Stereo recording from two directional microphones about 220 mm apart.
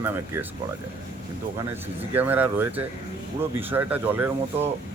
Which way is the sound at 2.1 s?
10° right (ahead or behind).